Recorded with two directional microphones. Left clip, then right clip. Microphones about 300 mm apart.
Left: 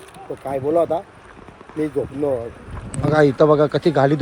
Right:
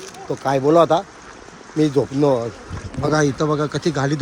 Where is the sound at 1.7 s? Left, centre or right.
Centre.